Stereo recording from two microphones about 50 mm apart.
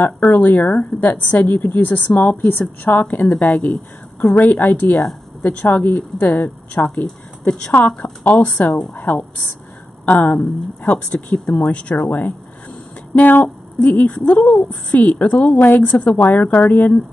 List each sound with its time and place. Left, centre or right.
0.0 s a woman's voice: left
7.9 s speech: left
8.3 s a woman's voice: left